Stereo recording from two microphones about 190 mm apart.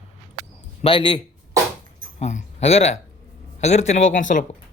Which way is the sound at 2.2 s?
35° left (ahead or behind).